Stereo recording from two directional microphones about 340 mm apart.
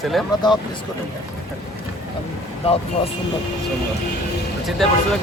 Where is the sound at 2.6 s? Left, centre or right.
Centre.